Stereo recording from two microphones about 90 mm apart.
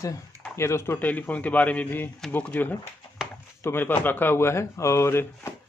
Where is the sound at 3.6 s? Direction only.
25° left (ahead or behind).